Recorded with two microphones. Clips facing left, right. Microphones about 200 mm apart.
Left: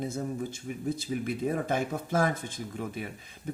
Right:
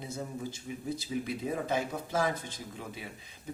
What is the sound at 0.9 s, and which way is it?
Speech, 50° left (ahead or behind).